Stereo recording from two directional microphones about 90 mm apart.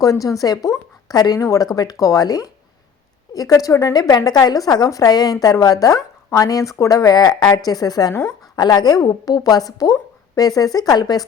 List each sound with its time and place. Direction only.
0.0 s a woman's voice: 40° left (ahead or behind)